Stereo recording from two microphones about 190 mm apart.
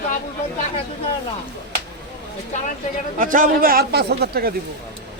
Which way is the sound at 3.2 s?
45° right (ahead or behind).